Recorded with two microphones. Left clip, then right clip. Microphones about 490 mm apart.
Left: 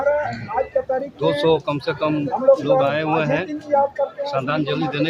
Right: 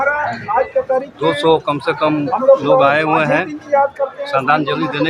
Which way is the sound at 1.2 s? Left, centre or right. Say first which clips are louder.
Right 3 dB; left.